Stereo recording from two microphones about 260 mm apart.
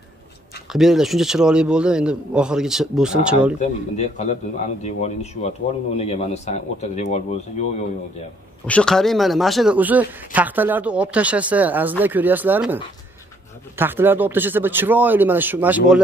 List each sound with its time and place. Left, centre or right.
0.7 s speech: centre
3.5 s a man's voice: left
8.6 s speech: centre